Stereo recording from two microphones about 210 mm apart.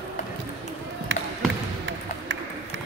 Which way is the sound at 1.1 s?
60° right (ahead or behind).